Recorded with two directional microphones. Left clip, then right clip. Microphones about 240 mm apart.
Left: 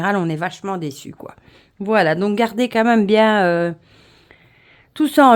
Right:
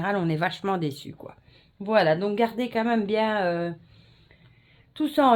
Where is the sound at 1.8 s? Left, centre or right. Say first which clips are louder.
Left 5 dB; left.